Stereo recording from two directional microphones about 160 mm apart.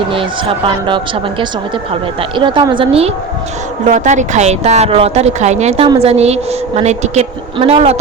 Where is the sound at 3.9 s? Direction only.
50° right (ahead or behind).